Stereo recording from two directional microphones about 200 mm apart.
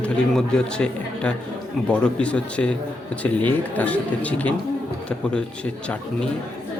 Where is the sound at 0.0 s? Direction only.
5° left (ahead or behind).